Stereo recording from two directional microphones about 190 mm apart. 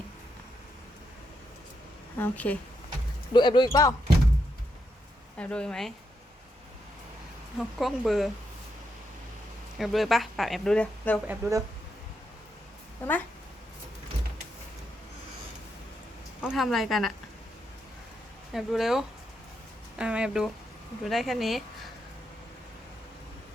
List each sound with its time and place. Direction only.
2.1 s speech: 10° left (ahead or behind)
3.3 s speech: 25° left (ahead or behind)
5.4 s speech: 5° left (ahead or behind)
7.8 s speech: centre (ahead or behind)
9.7 s speech: centre (ahead or behind)
11.3 s speech: 15° right (ahead or behind)
13.0 s speech: 10° left (ahead or behind)
16.4 s speech: centre (ahead or behind)
18.5 s speech: centre (ahead or behind)